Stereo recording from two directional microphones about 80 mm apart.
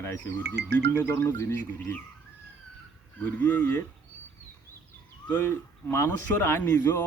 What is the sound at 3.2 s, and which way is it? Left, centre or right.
Speech, left.